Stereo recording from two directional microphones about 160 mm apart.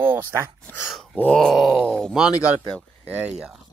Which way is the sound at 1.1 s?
5° left (ahead or behind).